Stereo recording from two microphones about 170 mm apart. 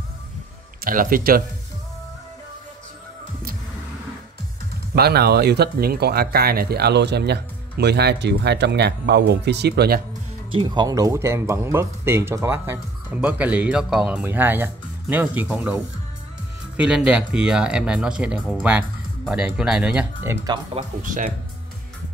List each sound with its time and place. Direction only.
0.8 s speech: 55° right (ahead or behind)
4.9 s speech: 70° right (ahead or behind)
10.5 s speech: 25° right (ahead or behind); by 20.3 s 5° right (ahead or behind)
21.0 s speech: 50° right (ahead or behind)